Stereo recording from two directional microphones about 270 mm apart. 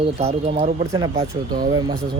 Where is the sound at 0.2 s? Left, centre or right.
Right.